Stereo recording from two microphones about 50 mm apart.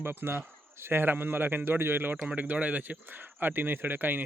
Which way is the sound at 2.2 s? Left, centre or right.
Right.